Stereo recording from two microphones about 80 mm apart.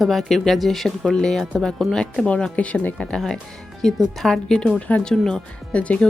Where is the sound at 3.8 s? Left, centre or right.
Centre.